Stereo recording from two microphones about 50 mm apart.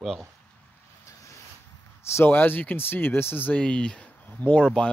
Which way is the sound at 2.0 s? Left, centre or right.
Left.